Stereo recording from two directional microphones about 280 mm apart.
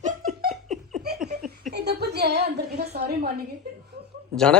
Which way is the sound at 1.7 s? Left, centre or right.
Right.